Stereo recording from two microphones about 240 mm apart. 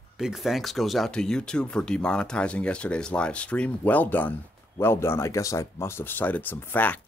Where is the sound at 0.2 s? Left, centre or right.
Centre.